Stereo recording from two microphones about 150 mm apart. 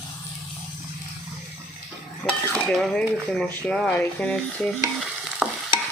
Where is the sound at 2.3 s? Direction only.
5° left (ahead or behind).